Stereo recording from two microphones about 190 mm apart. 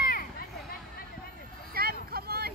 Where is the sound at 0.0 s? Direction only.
50° left (ahead or behind).